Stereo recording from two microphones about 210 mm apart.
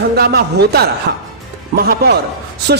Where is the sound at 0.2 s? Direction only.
50° right (ahead or behind).